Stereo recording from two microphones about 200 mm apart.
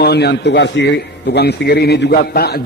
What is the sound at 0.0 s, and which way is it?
A man's voice, 55° left (ahead or behind).